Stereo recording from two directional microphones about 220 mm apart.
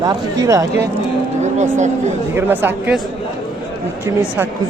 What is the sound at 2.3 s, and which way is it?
Speech, 10° right (ahead or behind).